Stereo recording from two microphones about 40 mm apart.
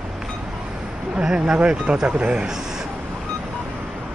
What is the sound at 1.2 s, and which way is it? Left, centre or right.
Speech, centre.